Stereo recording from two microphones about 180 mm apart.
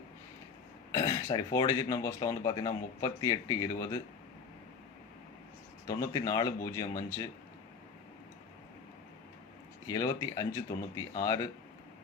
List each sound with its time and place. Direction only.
0.9 s speech: 20° left (ahead or behind)
5.8 s speech: 20° left (ahead or behind)
9.8 s speech: 20° left (ahead or behind)